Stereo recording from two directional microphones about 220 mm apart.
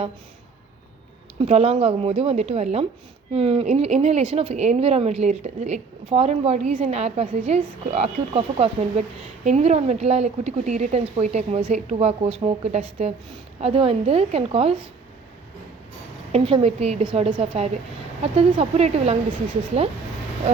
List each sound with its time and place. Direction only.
1.4 s speech: 30° right (ahead or behind)
16.3 s speech: 25° right (ahead or behind)